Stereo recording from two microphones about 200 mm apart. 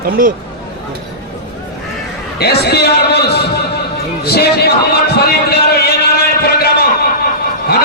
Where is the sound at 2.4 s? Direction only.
55° left (ahead or behind).